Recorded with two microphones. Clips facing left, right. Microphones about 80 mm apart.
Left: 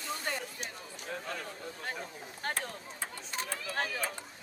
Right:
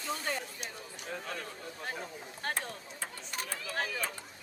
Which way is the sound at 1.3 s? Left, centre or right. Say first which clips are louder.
Left 1 dB; centre.